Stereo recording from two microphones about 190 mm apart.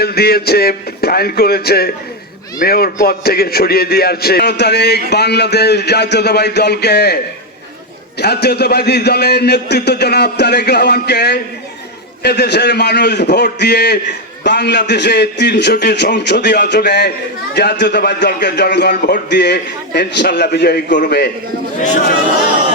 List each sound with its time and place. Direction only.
0.0 s a man's voice: 55° left (ahead or behind)
8.2 s a man's voice: 60° left (ahead or behind)
21.8 s a man's voice: 40° left (ahead or behind)